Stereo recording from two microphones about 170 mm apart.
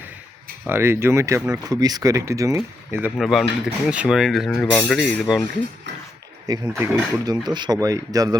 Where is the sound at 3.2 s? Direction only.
Centre (ahead or behind).